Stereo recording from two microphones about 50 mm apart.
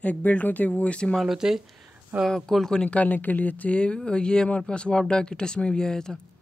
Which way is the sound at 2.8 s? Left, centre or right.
Left.